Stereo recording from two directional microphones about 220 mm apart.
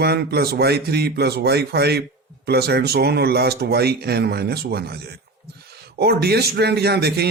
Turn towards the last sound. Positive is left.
turn(degrees=-45)  # may be behind; listen again after turning